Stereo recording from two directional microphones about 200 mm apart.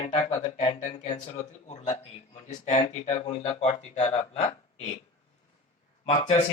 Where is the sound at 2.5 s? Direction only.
35° left (ahead or behind).